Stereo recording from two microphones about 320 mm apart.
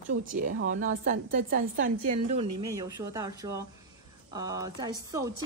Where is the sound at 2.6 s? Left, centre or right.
Centre.